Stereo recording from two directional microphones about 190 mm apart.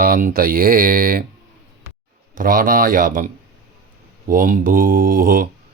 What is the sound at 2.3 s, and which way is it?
Speech, 50° right (ahead or behind).